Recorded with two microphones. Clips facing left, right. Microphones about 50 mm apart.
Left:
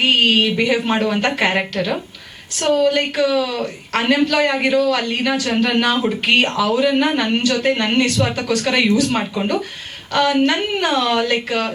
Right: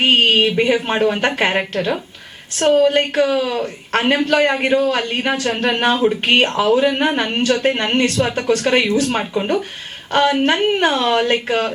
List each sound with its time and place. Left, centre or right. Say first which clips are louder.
0.0 s a woman's voice: right 1 dB; right
2.6 s a woman's voice: right 2 dB; right